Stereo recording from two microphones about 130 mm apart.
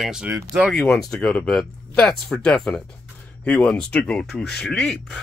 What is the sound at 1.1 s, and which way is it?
Speech, 10° left (ahead or behind).